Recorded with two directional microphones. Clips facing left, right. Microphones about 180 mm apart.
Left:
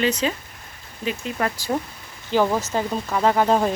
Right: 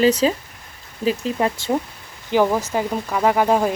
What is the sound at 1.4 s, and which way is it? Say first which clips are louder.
Speech: right 3 dB; 20° right (ahead or behind).